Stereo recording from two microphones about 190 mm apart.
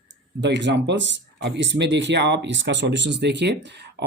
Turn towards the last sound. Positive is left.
turn(degrees=-65)  # may be behind; listen again after turning